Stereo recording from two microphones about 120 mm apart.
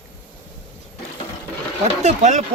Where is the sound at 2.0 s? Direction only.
75° right (ahead or behind).